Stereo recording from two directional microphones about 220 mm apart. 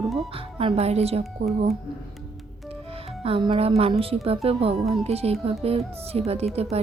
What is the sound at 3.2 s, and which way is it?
Speech, 25° right (ahead or behind).